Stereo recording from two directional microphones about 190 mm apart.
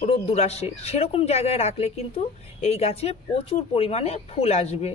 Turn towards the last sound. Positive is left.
turn(degrees=35)  # may be behind; listen again after turning